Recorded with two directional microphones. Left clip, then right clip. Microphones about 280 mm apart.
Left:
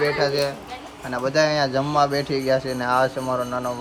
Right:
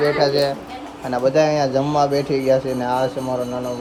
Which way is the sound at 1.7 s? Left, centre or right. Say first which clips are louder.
Right 2 dB; centre.